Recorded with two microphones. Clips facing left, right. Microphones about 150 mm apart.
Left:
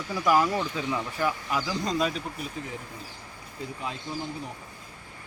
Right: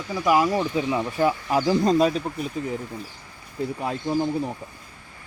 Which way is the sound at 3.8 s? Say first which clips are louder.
Right 8 dB; 55° right (ahead or behind).